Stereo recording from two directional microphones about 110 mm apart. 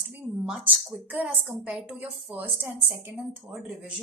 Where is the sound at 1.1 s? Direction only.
15° right (ahead or behind).